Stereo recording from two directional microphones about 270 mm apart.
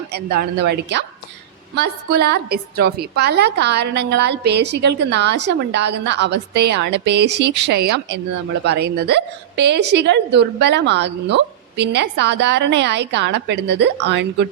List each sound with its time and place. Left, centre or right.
0.1 s a woman's voice: right